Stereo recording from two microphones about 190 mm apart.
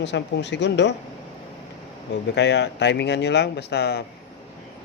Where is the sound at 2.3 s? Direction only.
65° left (ahead or behind).